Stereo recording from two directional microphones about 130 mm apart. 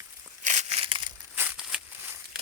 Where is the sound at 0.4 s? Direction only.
65° right (ahead or behind).